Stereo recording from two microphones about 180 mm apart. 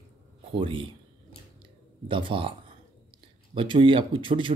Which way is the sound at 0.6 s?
30° right (ahead or behind).